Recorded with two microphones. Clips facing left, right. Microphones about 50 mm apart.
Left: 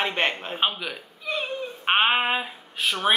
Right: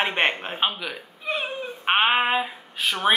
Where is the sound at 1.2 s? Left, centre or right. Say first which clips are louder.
Right 1 dB; right.